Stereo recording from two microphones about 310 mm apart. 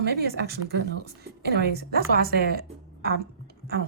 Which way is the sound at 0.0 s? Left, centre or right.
Right.